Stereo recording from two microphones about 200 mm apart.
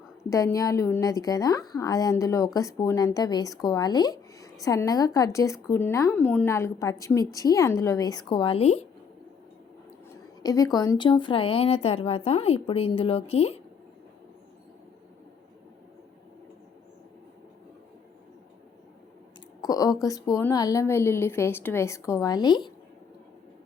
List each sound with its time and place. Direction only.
0.3 s a woman's voice: 15° left (ahead or behind); by 8.9 s 30° left (ahead or behind)
10.1 s a woman's voice: 15° left (ahead or behind)
19.6 s a woman's voice: 20° left (ahead or behind)